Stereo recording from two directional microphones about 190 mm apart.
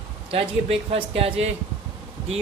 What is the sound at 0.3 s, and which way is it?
A man's voice, 30° right (ahead or behind).